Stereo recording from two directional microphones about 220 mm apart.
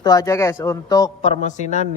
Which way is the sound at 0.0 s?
15° left (ahead or behind).